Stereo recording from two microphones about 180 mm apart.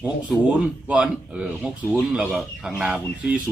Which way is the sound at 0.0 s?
5° right (ahead or behind).